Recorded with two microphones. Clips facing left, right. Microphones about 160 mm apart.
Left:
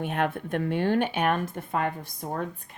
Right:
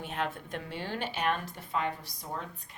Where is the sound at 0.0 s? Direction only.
60° left (ahead or behind).